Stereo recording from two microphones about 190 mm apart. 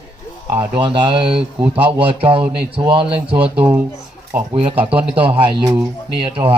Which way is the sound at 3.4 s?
10° right (ahead or behind).